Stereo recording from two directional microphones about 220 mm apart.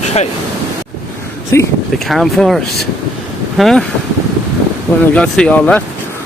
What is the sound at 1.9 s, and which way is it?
Speech, centre (ahead or behind).